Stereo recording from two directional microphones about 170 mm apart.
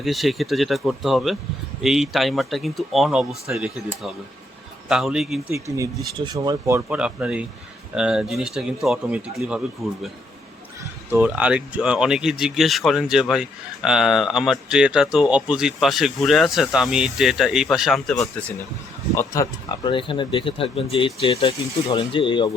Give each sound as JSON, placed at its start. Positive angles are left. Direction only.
{"t": 0.0, "sound": "speech", "side_deg": 0}
{"t": 6.1, "sound": "speech", "side_deg": -25}
{"t": 11.1, "sound": "speech", "side_deg": -10}
{"t": 19.1, "sound": "speech", "side_deg": 20}